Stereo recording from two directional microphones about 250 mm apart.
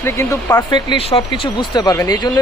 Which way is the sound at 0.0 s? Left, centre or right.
Centre.